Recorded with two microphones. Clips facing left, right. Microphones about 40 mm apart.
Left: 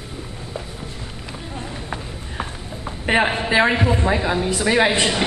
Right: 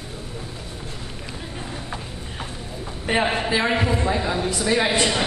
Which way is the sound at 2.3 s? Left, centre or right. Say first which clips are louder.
Left 5 dB; left.